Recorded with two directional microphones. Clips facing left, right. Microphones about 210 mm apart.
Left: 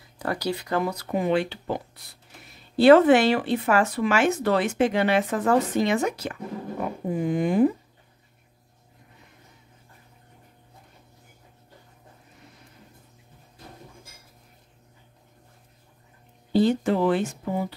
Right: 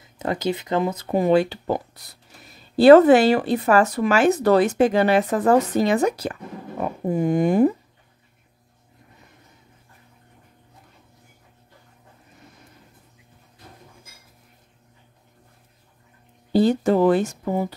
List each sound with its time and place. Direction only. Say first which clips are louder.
0.2 s speech: right 4 dB; 20° right (ahead or behind)
1.1 s speech: right 6 dB; 40° right (ahead or behind)
16.5 s speech: right 3 dB; 40° right (ahead or behind)